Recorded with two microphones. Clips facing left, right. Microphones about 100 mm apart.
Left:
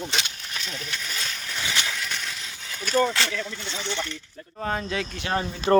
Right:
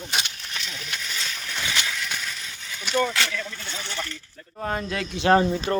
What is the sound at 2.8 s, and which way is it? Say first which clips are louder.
Speech: left 1 dB; 35° left (ahead or behind).